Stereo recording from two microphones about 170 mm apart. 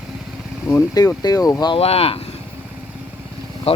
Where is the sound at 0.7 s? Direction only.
20° left (ahead or behind); by 2.2 s 35° left (ahead or behind).